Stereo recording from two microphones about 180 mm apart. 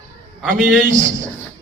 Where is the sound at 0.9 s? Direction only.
45° right (ahead or behind).